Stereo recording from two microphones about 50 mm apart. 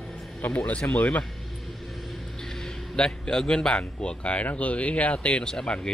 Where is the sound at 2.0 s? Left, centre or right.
Centre.